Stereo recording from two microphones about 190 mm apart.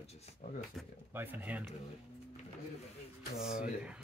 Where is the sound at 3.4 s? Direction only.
Centre (ahead or behind).